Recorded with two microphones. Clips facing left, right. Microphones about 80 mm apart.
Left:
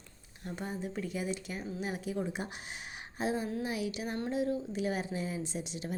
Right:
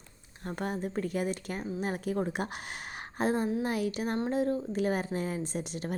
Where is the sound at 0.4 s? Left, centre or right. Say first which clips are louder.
Right 5 dB; right.